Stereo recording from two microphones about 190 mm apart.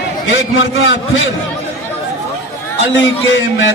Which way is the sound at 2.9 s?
80° left.